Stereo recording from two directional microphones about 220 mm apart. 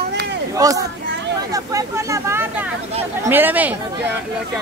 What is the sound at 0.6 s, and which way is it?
Speech, 15° right (ahead or behind).